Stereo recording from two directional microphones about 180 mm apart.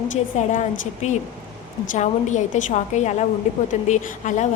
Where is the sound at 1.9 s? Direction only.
40° left (ahead or behind).